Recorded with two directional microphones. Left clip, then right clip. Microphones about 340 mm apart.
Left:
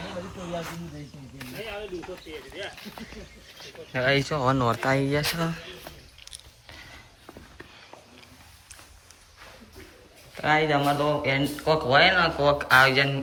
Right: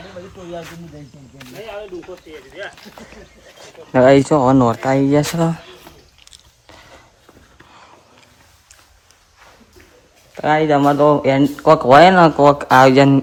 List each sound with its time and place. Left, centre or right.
3.9 s speech: centre
10.3 s speech: centre